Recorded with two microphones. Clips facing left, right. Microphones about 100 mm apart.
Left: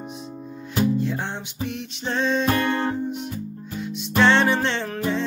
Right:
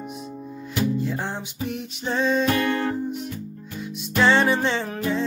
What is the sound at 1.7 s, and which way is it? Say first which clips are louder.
Music: right 1 dB; 5° right (ahead or behind).